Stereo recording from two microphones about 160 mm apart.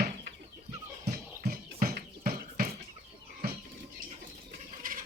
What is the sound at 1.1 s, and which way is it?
Music, 65° right (ahead or behind).